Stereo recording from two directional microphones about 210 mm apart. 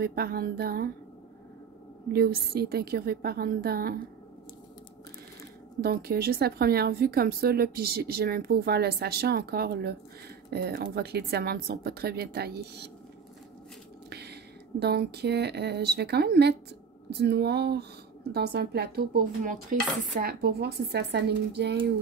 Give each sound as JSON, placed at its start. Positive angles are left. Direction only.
{"t": 0.0, "sound": "speech", "side_deg": -45}
{"t": 2.1, "sound": "speech", "side_deg": -50}
{"t": 5.8, "sound": "speech", "side_deg": -45}
{"t": 14.1, "sound": "speech", "side_deg": -50}